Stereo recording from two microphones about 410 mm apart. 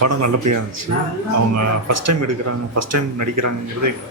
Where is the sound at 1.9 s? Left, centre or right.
Right.